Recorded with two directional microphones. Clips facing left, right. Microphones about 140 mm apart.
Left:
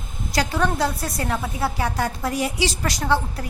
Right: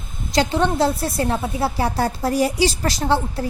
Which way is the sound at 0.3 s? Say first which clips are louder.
Right 4 dB; 25° right (ahead or behind).